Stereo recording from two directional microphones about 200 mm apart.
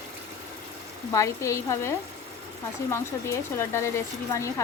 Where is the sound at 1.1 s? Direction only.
15° left (ahead or behind).